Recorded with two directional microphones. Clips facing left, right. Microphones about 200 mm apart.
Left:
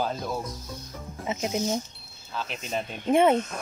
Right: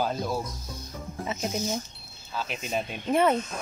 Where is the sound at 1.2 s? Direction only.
15° left (ahead or behind).